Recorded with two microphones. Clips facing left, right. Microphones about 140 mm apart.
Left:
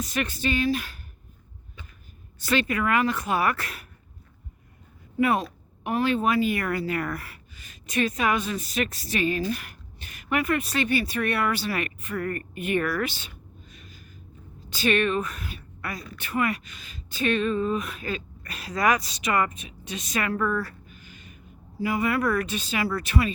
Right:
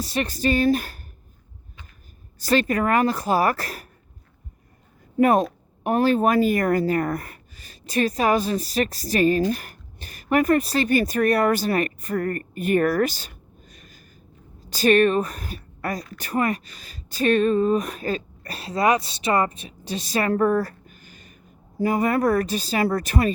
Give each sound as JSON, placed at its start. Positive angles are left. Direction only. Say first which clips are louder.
{"t": 0.0, "sound": "a woman's voice", "louder": "right 4 dB", "side_deg": -35}
{"t": 2.4, "sound": "a woman's voice", "louder": "right 4 dB", "side_deg": -40}
{"t": 5.1, "sound": "a woman's voice", "louder": "right 6 dB", "side_deg": -45}